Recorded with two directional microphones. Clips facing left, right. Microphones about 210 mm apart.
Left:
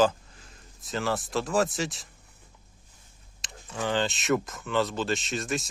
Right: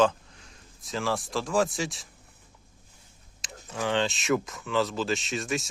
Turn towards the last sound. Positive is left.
turn(degrees=0)  # may be behind; listen again after turning